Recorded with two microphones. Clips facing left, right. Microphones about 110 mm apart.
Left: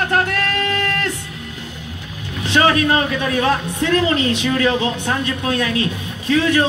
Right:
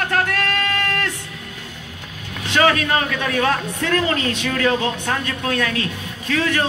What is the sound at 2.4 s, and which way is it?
A man's voice, 25° left (ahead or behind).